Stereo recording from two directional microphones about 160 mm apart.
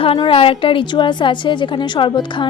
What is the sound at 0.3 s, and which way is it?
Speech, 35° left (ahead or behind).